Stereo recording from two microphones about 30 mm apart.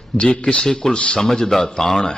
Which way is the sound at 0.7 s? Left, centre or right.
Centre.